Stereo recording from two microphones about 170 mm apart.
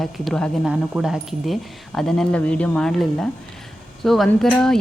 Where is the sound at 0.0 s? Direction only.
5° left (ahead or behind).